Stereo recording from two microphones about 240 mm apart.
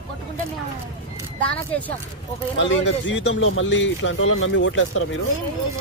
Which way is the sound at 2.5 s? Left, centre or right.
Left.